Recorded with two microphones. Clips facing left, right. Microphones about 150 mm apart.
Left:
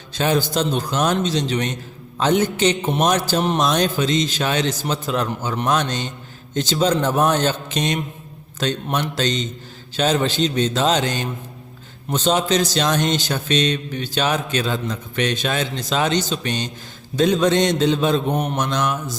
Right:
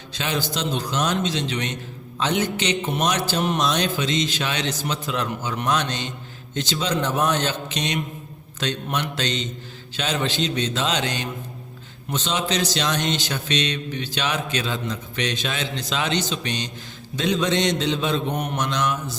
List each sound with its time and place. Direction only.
0.1 s speech: 45° left (ahead or behind)